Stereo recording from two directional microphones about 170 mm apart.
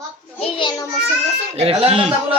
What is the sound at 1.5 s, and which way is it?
Speech, 35° right (ahead or behind).